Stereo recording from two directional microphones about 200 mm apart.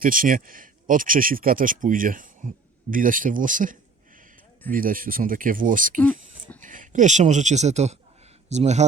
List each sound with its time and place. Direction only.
0.0 s speech: 45° right (ahead or behind)
6.0 s a sound: 5° left (ahead or behind)
6.6 s speech: 40° right (ahead or behind)